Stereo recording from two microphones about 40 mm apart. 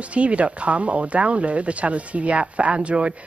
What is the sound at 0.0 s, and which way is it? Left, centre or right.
A woman's voice, right.